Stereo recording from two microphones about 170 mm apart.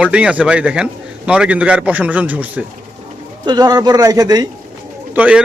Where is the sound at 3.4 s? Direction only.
25° right (ahead or behind).